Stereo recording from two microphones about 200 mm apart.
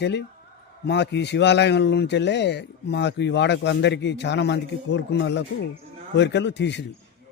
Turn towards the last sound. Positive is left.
turn(degrees=60)  # may be behind; listen again after turning